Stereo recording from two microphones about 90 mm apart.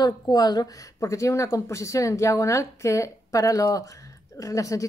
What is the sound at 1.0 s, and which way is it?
A woman's voice, 35° left (ahead or behind).